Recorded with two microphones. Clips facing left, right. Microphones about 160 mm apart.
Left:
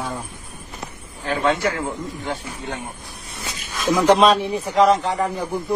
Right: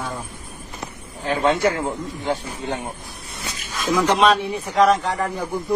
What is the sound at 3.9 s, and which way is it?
Speech, 30° left (ahead or behind).